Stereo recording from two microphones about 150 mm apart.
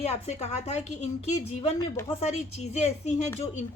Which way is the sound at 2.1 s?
45° left (ahead or behind).